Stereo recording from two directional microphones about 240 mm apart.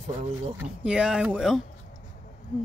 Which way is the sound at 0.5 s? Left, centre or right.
Centre.